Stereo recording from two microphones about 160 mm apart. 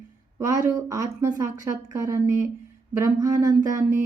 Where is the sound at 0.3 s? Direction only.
20° right (ahead or behind).